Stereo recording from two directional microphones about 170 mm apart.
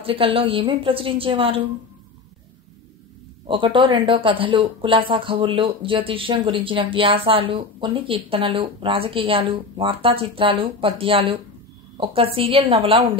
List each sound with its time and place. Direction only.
0.0 s speech: 30° right (ahead or behind)
3.4 s speech: 30° right (ahead or behind)